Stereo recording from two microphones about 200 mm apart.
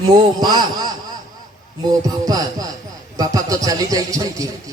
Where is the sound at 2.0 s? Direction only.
20° right (ahead or behind).